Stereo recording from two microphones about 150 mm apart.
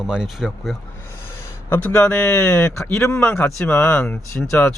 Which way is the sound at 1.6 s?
10° left (ahead or behind).